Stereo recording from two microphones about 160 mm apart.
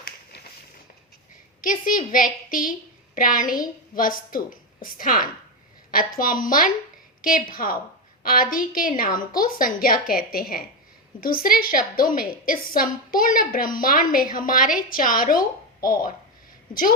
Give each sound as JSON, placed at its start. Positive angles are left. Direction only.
{"t": 1.6, "sound": "a woman's voice", "side_deg": 60}